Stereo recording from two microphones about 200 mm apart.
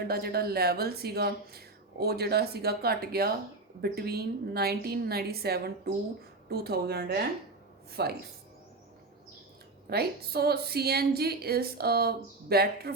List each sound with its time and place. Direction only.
0.1 s speech: 50° right (ahead or behind)
9.8 s speech: 50° right (ahead or behind)